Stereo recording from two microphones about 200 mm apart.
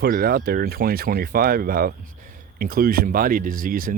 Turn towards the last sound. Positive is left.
turn(degrees=-45)  # may be behind; listen again after turning